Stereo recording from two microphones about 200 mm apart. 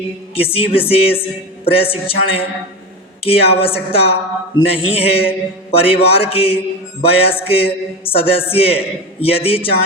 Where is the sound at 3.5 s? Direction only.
30° left (ahead or behind).